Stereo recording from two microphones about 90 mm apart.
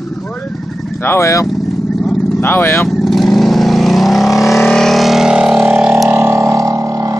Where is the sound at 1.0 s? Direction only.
30° left (ahead or behind).